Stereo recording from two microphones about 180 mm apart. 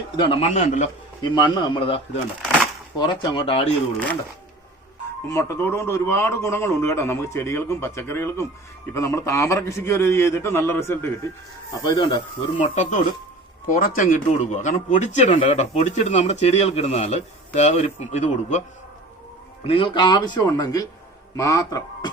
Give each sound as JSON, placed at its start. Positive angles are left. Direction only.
{"t": 0.2, "sound": "speech", "side_deg": 30}
{"t": 1.2, "sound": "a man's voice", "side_deg": 25}
{"t": 5.3, "sound": "a man's voice", "side_deg": 15}
{"t": 11.8, "sound": "a man's voice", "side_deg": 25}
{"t": 12.5, "sound": "speech", "side_deg": 40}
{"t": 19.6, "sound": "a man's voice", "side_deg": 30}